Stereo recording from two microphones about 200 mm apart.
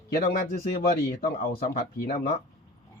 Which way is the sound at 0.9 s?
45° left (ahead or behind).